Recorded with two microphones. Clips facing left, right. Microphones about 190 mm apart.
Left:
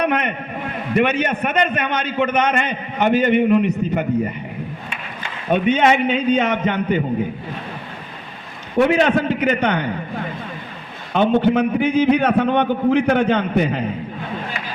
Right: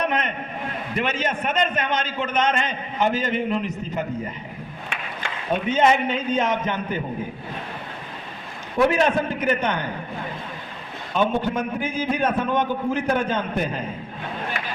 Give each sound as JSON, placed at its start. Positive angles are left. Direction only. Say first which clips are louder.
{"t": 0.0, "sound": "a sound", "louder": "left 5 dB", "side_deg": 65}
{"t": 0.9, "sound": "a man's voice", "louder": "left 7 dB", "side_deg": 65}
{"t": 5.5, "sound": "a man's voice", "louder": "left 4 dB", "side_deg": 70}
{"t": 8.8, "sound": "a man's voice", "louder": "left 4 dB", "side_deg": 70}
{"t": 11.1, "sound": "a man's voice", "louder": "left 7 dB", "side_deg": 65}